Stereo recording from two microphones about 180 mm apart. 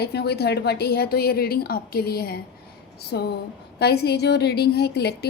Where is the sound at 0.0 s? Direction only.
65° left (ahead or behind).